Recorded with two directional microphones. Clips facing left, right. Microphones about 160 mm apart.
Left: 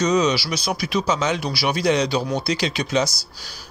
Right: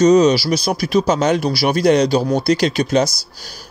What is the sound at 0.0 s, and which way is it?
Speech, 45° right (ahead or behind).